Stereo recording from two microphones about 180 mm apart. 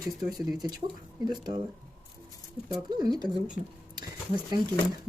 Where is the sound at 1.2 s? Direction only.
25° right (ahead or behind).